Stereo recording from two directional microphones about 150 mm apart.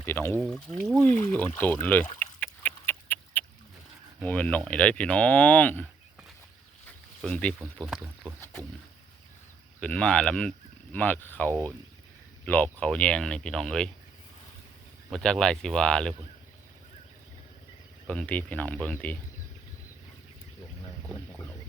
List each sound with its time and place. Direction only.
0.0 s speech: 15° left (ahead or behind)
0.3 s speech: 5° left (ahead or behind)
2.1 s a sound: 10° left (ahead or behind)
4.2 s speech: 10° left (ahead or behind)
7.2 s speech: 5° left (ahead or behind)
9.8 s speech: 5° left (ahead or behind)
15.1 s speech: 5° left (ahead or behind)
18.1 s speech: 10° left (ahead or behind)